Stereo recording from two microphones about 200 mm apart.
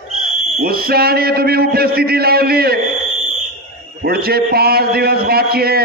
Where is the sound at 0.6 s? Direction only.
50° right (ahead or behind).